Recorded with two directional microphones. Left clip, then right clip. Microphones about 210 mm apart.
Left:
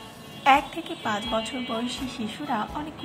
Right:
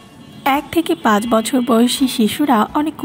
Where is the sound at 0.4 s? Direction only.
30° right (ahead or behind).